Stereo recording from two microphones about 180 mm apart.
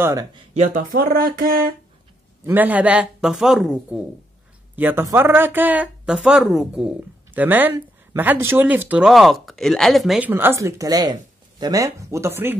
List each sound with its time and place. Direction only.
0.0 s speech: 20° right (ahead or behind)
0.6 s speech: 55° right (ahead or behind)
2.4 s a woman's voice: 10° right (ahead or behind)